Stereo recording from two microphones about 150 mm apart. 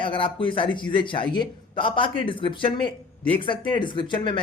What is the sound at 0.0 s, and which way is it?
A man's voice, 35° left (ahead or behind).